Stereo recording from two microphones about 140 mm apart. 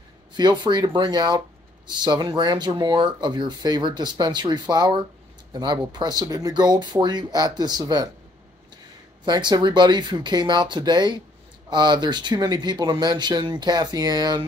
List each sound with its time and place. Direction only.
0.3 s speech: 35° right (ahead or behind)
9.2 s speech: 30° right (ahead or behind)